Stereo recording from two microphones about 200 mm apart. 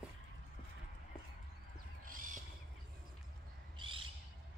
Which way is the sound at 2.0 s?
40° right (ahead or behind).